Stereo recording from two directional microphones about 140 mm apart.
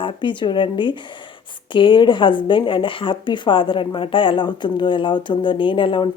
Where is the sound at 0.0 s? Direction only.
35° left (ahead or behind).